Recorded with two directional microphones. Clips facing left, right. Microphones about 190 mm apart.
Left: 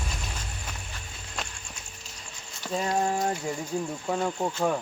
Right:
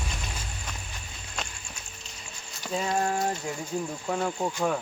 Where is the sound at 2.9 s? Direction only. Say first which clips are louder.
Left 1 dB; centre (ahead or behind).